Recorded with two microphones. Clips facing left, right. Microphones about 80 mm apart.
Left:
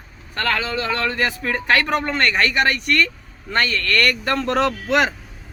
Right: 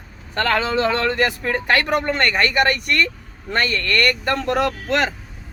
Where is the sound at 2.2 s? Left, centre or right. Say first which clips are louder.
Even; centre.